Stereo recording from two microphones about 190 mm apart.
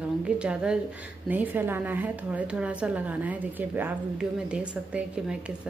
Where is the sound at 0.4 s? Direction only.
5° right (ahead or behind).